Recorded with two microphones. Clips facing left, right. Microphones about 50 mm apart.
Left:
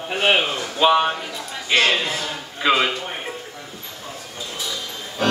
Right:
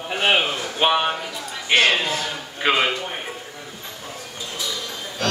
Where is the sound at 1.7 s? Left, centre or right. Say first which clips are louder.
Right 1 dB; right.